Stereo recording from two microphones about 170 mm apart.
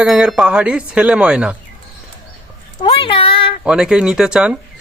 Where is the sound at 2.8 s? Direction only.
30° left (ahead or behind).